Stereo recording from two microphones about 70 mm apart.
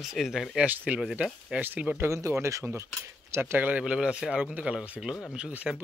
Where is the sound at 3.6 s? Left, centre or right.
Centre.